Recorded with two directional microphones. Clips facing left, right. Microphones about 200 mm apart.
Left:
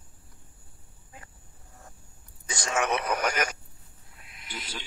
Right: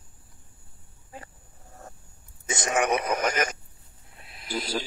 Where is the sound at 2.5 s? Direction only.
20° right (ahead or behind).